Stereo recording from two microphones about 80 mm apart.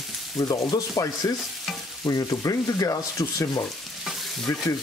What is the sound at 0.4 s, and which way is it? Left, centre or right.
Speech, left.